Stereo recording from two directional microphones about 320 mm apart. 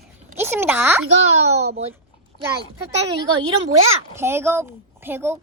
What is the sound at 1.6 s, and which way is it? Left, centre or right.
Speech, centre.